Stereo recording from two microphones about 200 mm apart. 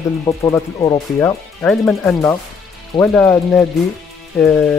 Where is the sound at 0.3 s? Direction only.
15° left (ahead or behind).